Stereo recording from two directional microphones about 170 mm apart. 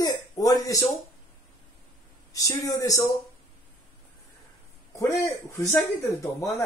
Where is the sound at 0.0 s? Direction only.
20° left (ahead or behind).